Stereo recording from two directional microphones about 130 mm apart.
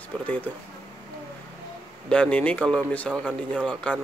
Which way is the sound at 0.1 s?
10° left (ahead or behind).